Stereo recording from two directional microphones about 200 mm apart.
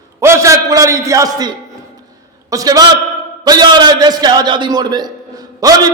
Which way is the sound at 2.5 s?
20° right (ahead or behind).